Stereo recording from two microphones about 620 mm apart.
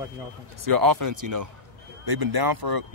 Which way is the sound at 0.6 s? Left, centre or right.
Right.